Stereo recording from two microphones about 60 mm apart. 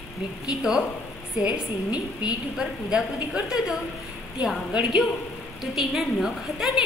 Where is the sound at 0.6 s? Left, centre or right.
Centre.